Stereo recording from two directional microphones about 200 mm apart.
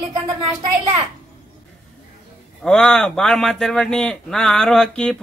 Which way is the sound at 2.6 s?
5° left (ahead or behind).